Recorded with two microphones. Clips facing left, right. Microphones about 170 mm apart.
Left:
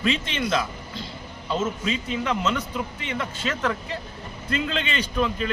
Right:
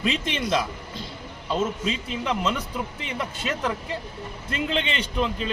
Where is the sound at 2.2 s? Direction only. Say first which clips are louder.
Right 1 dB; 10° right (ahead or behind).